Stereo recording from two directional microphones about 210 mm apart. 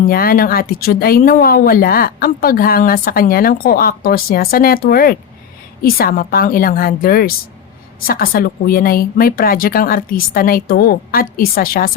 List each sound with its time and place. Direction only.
0.1 s speech: 45° left (ahead or behind)